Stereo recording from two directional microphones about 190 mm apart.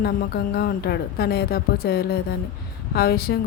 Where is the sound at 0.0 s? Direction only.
55° left (ahead or behind).